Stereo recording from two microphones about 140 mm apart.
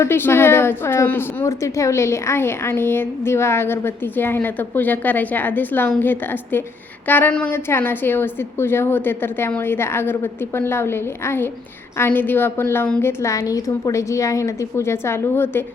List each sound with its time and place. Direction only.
0.0 s a woman's voice: 15° left (ahead or behind)